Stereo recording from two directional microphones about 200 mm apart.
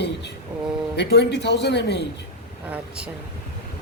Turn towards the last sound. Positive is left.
turn(degrees=-10)  # may be behind; listen again after turning